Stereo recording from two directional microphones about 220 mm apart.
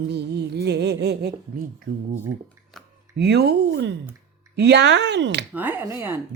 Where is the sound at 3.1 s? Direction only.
50° right (ahead or behind).